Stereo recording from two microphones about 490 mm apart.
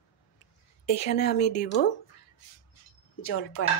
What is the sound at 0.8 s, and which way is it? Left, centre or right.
Speech, centre.